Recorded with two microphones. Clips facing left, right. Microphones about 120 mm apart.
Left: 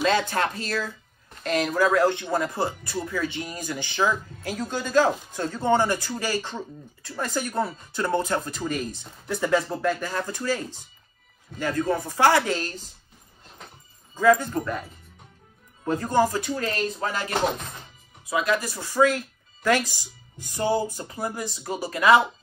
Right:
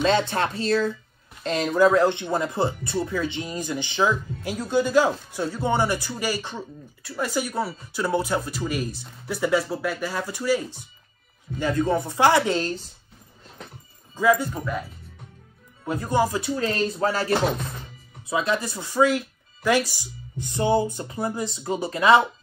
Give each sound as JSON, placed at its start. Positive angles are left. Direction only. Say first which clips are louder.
{"t": 0.0, "sound": "speech", "louder": "right 1 dB", "side_deg": -25}
{"t": 14.1, "sound": "speech", "louder": "left 1 dB", "side_deg": -10}
{"t": 16.4, "sound": "speech", "louder": "right 3 dB", "side_deg": -30}